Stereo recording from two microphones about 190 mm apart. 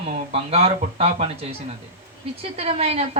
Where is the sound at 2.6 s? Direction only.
35° right (ahead or behind).